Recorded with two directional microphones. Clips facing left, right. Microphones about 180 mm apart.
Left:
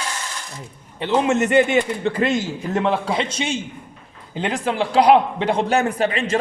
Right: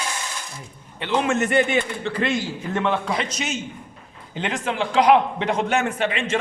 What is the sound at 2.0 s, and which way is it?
A man's voice, 45° left (ahead or behind).